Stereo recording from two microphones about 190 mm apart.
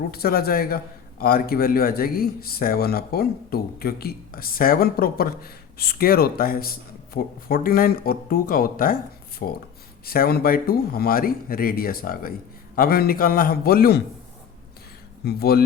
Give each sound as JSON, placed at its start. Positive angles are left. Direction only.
{"t": 0.1, "sound": "speech", "side_deg": 55}
{"t": 15.2, "sound": "speech", "side_deg": 55}